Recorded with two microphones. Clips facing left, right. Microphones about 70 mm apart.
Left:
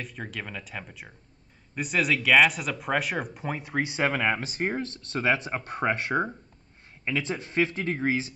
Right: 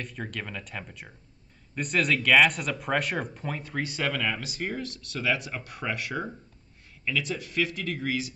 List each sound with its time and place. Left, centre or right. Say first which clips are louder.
0.0 s speech: even; centre
3.4 s speech: left 3 dB; centre